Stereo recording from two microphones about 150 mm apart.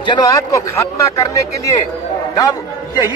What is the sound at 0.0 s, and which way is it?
A man's voice, 25° left (ahead or behind).